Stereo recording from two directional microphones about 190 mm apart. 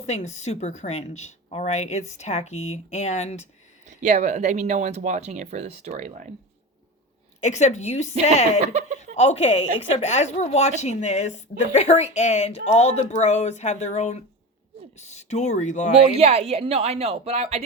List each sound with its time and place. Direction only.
0.0 s a woman's voice: 35° left (ahead or behind)
3.8 s speech: 40° right (ahead or behind)
7.4 s a woman's voice: 35° left (ahead or behind)
9.1 s a woman's voice: 35° left (ahead or behind)
16.1 s speech: 30° right (ahead or behind)